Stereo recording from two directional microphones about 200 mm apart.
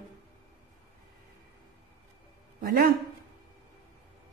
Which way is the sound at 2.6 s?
50° right (ahead or behind).